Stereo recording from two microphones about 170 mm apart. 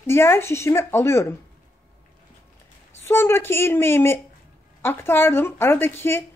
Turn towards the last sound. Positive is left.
turn(degrees=15)  # may be behind; listen again after turning